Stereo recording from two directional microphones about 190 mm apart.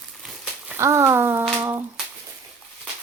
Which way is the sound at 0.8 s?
15° right (ahead or behind).